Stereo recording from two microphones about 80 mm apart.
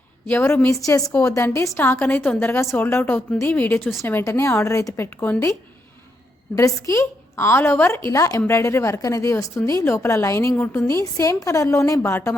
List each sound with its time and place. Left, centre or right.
0.3 s a woman's voice: left
0.9 s a woman's voice: left
1.8 s a woman's voice: left
4.2 s a woman's voice: left
4.9 s a woman's voice: left
6.6 s a woman's voice: left
10.8 s a woman's voice: left